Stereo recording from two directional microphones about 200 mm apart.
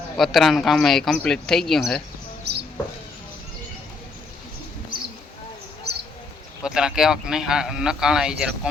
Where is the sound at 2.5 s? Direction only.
55° right (ahead or behind).